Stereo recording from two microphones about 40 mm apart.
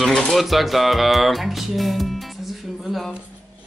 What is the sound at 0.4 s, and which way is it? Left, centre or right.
Speech, centre.